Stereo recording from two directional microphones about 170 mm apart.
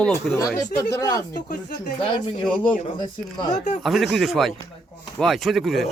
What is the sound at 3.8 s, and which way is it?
A man's voice, centre (ahead or behind).